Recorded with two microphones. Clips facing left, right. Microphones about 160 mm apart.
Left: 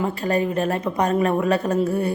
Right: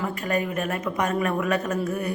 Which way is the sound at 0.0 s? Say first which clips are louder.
Left 4 dB; 30° left (ahead or behind).